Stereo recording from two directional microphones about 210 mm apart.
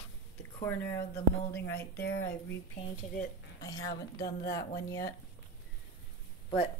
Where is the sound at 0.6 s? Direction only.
10° left (ahead or behind).